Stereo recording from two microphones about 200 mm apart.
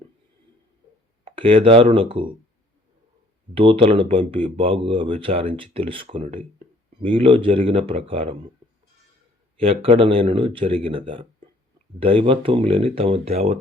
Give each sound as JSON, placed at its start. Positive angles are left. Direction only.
{"t": 1.2, "sound": "speech", "side_deg": -25}
{"t": 3.5, "sound": "speech", "side_deg": -25}
{"t": 9.6, "sound": "speech", "side_deg": -30}